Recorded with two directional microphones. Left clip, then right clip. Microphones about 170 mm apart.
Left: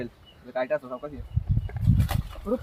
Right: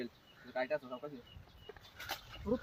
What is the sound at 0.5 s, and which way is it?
Speech, centre (ahead or behind).